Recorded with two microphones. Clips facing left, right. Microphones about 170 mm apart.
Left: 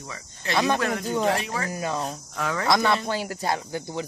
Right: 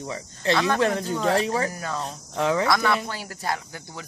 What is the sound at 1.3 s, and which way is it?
Speech, 30° right (ahead or behind).